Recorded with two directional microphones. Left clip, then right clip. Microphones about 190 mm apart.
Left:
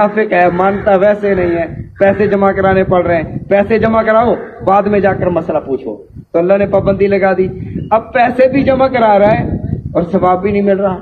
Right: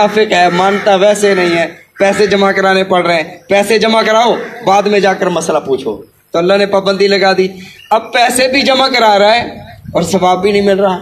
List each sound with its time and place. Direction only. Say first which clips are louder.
0.0 s a man's voice: right 1 dB; 40° right (ahead or behind)